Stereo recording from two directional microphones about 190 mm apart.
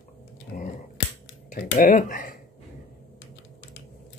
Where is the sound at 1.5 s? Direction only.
45° left (ahead or behind).